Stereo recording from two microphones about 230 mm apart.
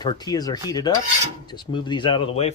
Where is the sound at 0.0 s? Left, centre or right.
Centre.